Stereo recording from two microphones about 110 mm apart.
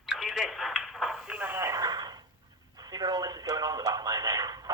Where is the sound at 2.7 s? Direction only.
35° right (ahead or behind).